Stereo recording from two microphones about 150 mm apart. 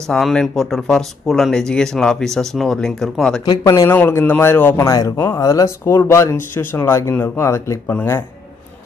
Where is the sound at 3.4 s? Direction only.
25° left (ahead or behind).